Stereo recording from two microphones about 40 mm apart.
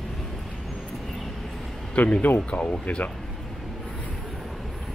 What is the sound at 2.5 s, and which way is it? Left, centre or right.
Speech, left.